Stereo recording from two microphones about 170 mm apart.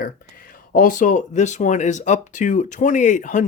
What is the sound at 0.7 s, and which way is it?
Speech, 50° left (ahead or behind).